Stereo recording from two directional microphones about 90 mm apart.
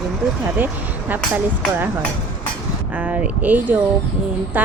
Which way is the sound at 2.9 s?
15° right (ahead or behind).